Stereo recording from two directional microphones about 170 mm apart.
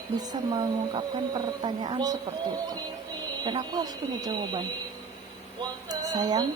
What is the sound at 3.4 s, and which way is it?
Speech, 25° right (ahead or behind).